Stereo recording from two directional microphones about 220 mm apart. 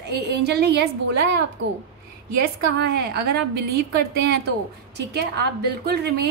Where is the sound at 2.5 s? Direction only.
45° right (ahead or behind).